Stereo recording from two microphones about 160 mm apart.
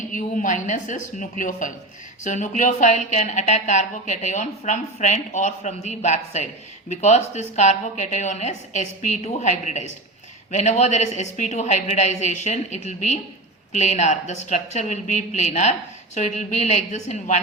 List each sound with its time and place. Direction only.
0.1 s a woman's voice: 55° left (ahead or behind)